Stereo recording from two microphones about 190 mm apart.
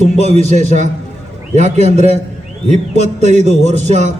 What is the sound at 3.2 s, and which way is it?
Speech, 35° right (ahead or behind).